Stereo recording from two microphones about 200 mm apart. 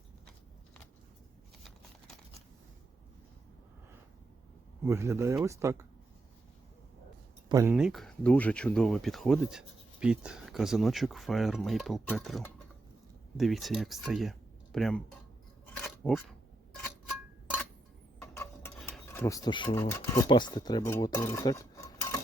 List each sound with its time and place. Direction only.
1.6 s a sound: centre (ahead or behind)
4.9 s speech: 15° right (ahead or behind)
7.4 s a sound: 15° right (ahead or behind)
7.7 s speech: 5° right (ahead or behind)
15.8 s scissors: 5° left (ahead or behind)
18.8 s speech: centre (ahead or behind)